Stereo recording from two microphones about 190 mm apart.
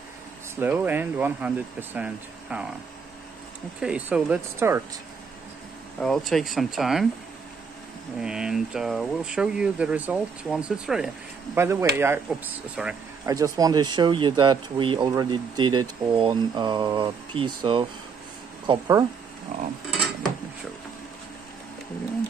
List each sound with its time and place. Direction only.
0.6 s speech: 10° right (ahead or behind)
3.8 s speech: 5° right (ahead or behind)
5.9 s speech: centre (ahead or behind)
8.2 s speech: 5° right (ahead or behind)
11.5 s speech: 15° right (ahead or behind)
13.3 s speech: 20° right (ahead or behind)
19.5 s a sound: 40° right (ahead or behind)